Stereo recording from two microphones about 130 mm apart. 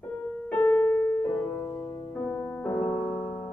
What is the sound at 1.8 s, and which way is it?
Music, 20° left (ahead or behind).